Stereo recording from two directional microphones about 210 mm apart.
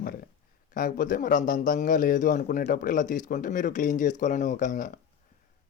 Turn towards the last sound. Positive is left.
turn(degrees=35)  # may be behind; listen again after turning